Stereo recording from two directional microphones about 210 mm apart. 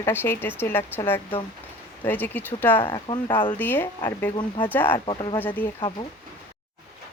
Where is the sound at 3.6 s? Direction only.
10° left (ahead or behind).